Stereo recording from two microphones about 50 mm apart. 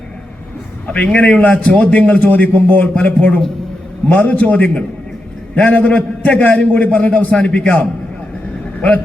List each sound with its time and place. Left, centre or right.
0.9 s a man's voice: left